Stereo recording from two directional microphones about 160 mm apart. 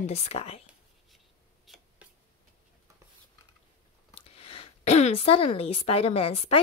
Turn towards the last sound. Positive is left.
turn(degrees=35)  # may be behind; listen again after turning